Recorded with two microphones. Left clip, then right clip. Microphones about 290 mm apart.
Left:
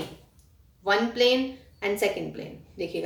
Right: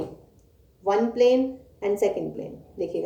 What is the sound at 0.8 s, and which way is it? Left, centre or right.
A woman's voice, left.